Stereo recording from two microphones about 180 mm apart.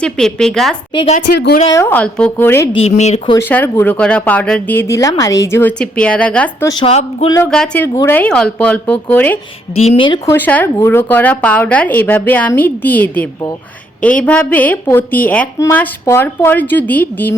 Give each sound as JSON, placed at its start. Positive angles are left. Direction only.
{"t": 0.0, "sound": "a woman's voice", "side_deg": 5}
{"t": 0.9, "sound": "speech", "side_deg": 35}
{"t": 1.3, "sound": "speech", "side_deg": 65}
{"t": 1.7, "sound": "a woman's voice", "side_deg": 10}
{"t": 2.8, "sound": "speech", "side_deg": 40}
{"t": 3.3, "sound": "a woman's voice", "side_deg": 10}
{"t": 6.7, "sound": "a woman's voice", "side_deg": 25}
{"t": 7.5, "sound": "a woman's voice", "side_deg": 5}
{"t": 9.7, "sound": "speech", "side_deg": 35}
{"t": 10.2, "sound": "a woman's voice", "side_deg": 10}